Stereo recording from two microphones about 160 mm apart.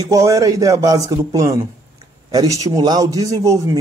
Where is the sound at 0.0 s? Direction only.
20° right (ahead or behind).